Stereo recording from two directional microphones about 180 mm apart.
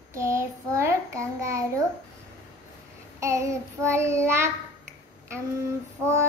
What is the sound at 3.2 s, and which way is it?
Child singing, 15° right (ahead or behind).